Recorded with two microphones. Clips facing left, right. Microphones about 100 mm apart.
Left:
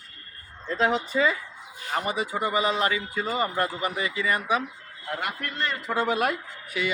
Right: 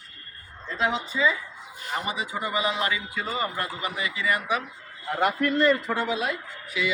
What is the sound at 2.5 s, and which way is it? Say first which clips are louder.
Music: left 1 dB; 40° left (ahead or behind).